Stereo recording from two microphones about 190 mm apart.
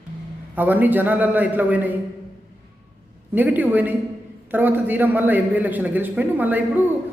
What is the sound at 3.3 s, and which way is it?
A man's voice, 10° right (ahead or behind).